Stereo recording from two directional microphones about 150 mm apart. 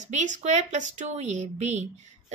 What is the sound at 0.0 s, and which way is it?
Speech, 55° right (ahead or behind).